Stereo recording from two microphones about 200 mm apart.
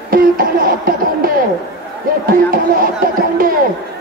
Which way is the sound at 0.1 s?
45° right (ahead or behind).